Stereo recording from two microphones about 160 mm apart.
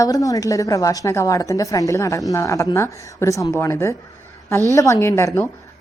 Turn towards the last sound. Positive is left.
turn(degrees=15)  # may be behind; listen again after turning